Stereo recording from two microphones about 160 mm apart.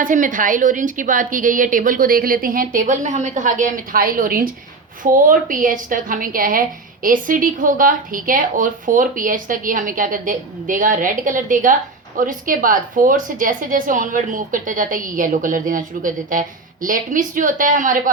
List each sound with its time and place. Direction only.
0.0 s a woman's voice: 55° right (ahead or behind)